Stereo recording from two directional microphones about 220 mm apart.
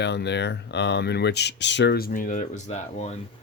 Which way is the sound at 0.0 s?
50° left (ahead or behind).